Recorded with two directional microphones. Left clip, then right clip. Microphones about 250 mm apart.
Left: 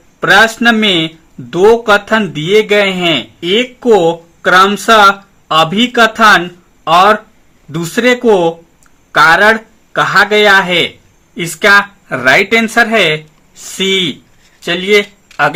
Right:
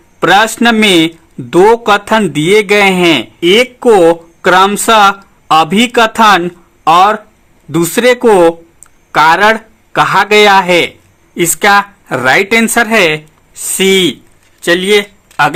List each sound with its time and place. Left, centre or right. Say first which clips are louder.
0.2 s a man's voice: even; right
7.7 s speech: right 3 dB; right